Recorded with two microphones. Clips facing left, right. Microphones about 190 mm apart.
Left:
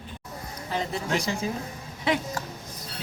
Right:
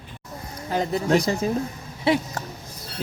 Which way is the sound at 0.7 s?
40° right (ahead or behind).